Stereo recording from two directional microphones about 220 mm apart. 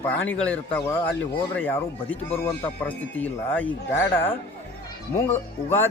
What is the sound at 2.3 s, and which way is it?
Speech, 10° left (ahead or behind).